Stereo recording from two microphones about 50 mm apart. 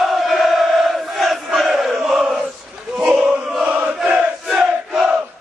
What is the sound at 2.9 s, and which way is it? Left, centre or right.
Battle cry, right.